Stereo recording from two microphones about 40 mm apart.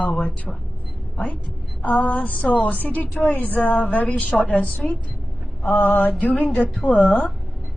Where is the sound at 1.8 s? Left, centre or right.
Left.